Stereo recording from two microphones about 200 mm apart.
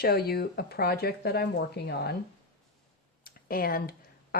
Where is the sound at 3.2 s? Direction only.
45° left (ahead or behind).